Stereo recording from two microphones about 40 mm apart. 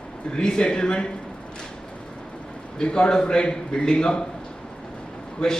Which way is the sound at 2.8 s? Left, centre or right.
Left.